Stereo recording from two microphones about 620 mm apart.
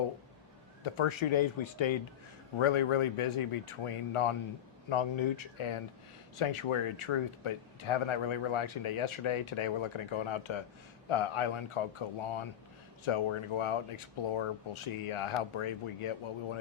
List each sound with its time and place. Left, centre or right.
0.9 s speech: left